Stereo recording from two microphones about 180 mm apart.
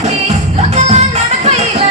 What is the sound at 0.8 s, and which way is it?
Music, 35° right (ahead or behind).